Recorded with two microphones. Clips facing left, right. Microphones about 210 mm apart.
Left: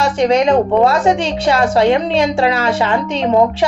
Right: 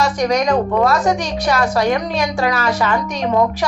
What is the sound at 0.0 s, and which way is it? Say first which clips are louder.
A woman's voice: left 4 dB; 25° left (ahead or behind).